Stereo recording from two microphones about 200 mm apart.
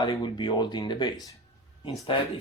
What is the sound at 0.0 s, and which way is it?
Speech, 25° left (ahead or behind).